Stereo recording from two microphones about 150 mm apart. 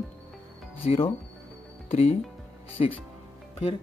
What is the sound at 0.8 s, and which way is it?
Speech, 40° left (ahead or behind).